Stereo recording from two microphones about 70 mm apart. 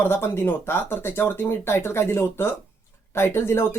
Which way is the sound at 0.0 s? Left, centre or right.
Left.